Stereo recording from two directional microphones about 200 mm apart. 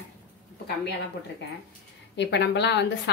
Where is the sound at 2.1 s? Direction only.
60° left (ahead or behind).